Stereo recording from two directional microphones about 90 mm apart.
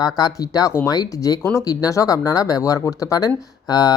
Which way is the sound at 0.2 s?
45° left (ahead or behind).